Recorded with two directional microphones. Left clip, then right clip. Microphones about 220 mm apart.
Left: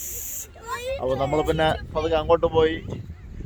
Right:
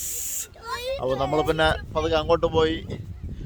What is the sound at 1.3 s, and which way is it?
Speech, 5° right (ahead or behind).